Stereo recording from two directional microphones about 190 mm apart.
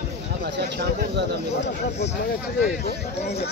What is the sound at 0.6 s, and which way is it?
Speech, 60° right (ahead or behind).